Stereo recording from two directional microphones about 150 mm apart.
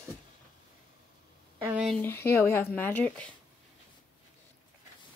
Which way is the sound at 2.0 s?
15° left (ahead or behind).